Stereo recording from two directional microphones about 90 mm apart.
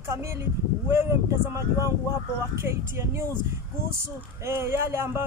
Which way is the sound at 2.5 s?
30° right (ahead or behind).